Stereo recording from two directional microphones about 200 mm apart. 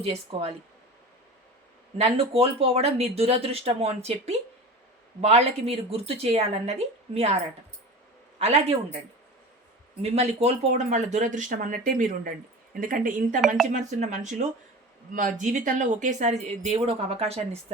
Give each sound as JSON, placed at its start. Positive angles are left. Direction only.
{"t": 0.0, "sound": "speech", "side_deg": -30}
{"t": 2.0, "sound": "speech", "side_deg": -30}
{"t": 8.4, "sound": "speech", "side_deg": -30}
{"t": 10.0, "sound": "speech", "side_deg": -30}
{"t": 15.4, "sound": "speech", "side_deg": -40}